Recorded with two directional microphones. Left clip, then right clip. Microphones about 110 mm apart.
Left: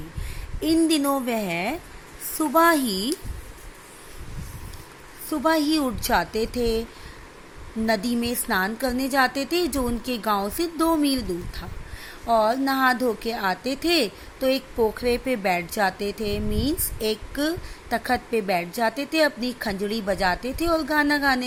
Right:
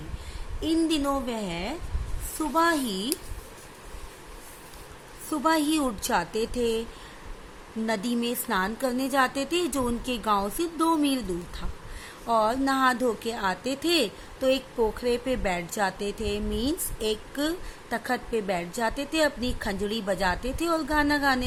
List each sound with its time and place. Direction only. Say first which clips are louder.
0.6 s a woman's voice: left 4 dB; 65° left (ahead or behind)
5.3 s a woman's voice: left 3 dB; 30° left (ahead or behind)
7.9 s a woman's voice: left 4 dB; 30° left (ahead or behind)